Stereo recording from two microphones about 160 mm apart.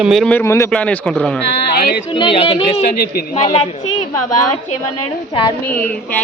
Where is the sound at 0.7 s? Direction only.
5° left (ahead or behind).